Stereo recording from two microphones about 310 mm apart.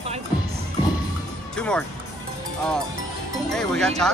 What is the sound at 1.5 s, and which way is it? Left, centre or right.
Speech, centre.